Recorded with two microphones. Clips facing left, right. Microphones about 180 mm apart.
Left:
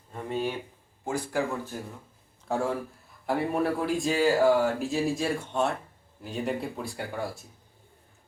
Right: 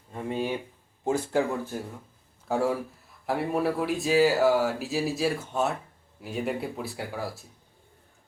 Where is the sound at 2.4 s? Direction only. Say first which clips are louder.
Right 2 dB; 5° right (ahead or behind).